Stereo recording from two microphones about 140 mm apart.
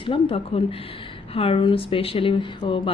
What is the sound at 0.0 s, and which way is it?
A woman's voice, 40° left (ahead or behind).